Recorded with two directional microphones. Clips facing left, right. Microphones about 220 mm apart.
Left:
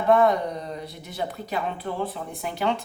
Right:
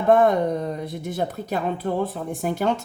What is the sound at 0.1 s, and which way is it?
Speech, 50° right (ahead or behind).